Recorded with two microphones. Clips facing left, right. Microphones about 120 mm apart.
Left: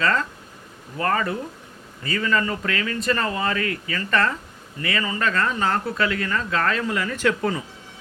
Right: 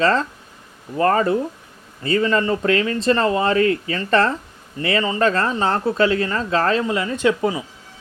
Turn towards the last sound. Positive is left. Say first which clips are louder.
# right 4 dB
turn(degrees=-15)  # may be behind; listen again after turning